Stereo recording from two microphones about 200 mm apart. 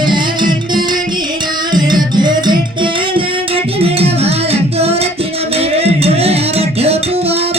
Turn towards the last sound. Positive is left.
turn(degrees=-30)  # may be behind; listen again after turning